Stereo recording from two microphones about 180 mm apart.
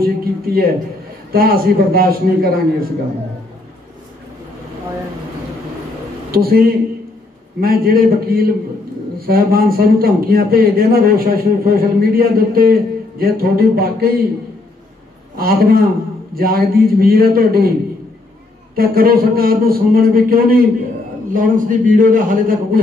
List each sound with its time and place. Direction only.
0.0 s speech: 55° right (ahead or behind)
6.3 s speech: 55° right (ahead or behind)
15.3 s speech: 55° right (ahead or behind)
18.8 s a man's voice: 55° right (ahead or behind)